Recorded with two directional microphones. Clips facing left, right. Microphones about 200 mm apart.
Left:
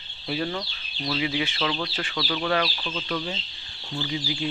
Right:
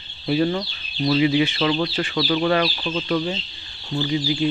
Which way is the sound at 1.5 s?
15° right (ahead or behind).